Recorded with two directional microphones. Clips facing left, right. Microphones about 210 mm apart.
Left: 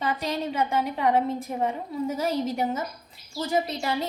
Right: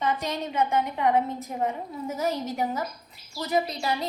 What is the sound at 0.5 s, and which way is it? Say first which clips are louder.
A woman's voice: right 4 dB; 30° left (ahead or behind).